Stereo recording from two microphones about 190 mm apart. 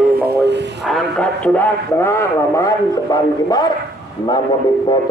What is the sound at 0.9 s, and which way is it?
A man's voice, centre (ahead or behind).